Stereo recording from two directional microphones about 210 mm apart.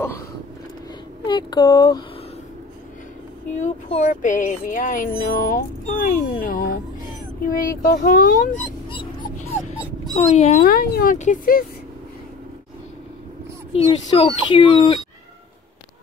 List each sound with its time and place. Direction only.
1.2 s speech: 20° left (ahead or behind)
3.5 s speech: 35° left (ahead or behind)
10.1 s speech: 30° left (ahead or behind)
10.6 s speech: 45° left (ahead or behind)
13.7 s speech: 25° left (ahead or behind)